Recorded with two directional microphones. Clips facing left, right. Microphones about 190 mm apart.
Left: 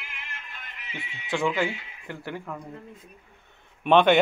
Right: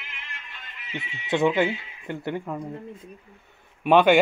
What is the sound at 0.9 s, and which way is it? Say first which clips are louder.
Speech: right 5 dB; 20° right (ahead or behind).